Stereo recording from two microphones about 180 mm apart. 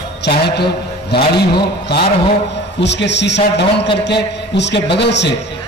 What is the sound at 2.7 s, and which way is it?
A man's voice, 75° left (ahead or behind).